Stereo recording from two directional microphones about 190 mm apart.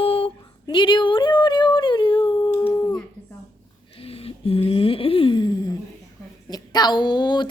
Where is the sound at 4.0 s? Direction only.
30° left (ahead or behind).